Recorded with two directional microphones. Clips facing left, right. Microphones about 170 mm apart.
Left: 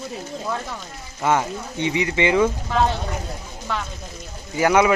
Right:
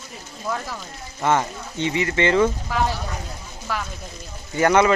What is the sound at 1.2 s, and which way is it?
Speech, 10° left (ahead or behind).